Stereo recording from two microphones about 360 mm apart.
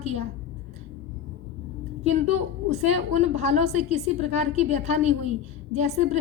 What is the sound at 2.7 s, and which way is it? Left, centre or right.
A woman's voice, centre.